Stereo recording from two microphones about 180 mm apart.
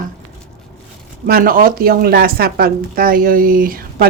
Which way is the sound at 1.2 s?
55° right (ahead or behind).